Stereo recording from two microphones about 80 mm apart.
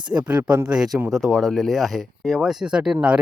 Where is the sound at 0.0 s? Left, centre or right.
Right.